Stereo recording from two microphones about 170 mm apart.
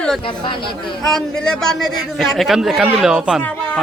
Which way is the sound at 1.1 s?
5° left (ahead or behind).